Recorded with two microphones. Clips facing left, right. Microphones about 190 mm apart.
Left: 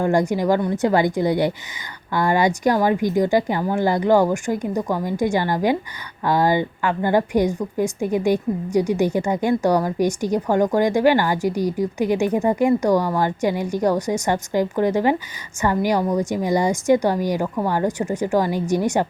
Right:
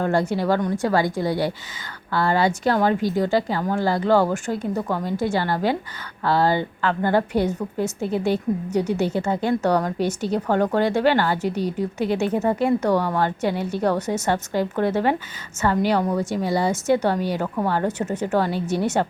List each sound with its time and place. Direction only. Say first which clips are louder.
0.0 s a woman's voice: left 2 dB; 15° left (ahead or behind)